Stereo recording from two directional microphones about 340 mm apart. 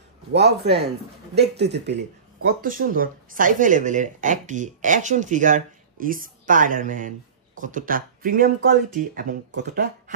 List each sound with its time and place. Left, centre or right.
0.3 s speech: right